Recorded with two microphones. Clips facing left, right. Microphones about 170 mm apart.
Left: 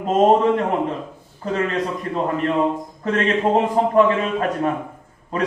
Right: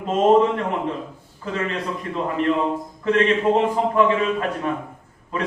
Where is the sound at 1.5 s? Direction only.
40° left (ahead or behind).